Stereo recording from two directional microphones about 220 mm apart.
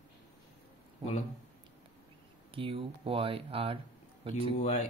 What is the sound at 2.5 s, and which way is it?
Speech, 25° right (ahead or behind).